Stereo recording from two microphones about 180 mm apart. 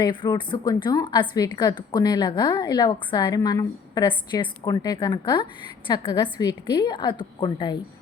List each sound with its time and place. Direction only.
0.0 s a woman's voice: 25° left (ahead or behind)